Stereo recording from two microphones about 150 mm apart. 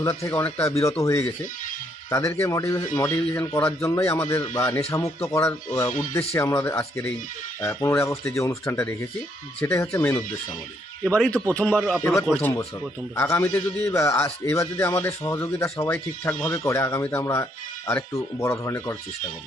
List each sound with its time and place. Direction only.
0.0 s a man's voice: 20° left (ahead or behind)
11.0 s a man's voice: 5° left (ahead or behind)